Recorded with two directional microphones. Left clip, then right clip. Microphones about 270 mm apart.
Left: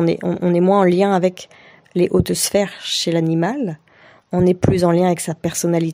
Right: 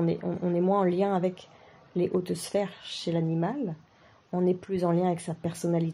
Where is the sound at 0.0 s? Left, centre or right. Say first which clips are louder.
Left 11 dB; left.